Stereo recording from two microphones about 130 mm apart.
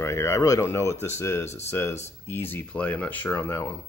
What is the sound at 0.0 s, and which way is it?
Speech, 20° left (ahead or behind).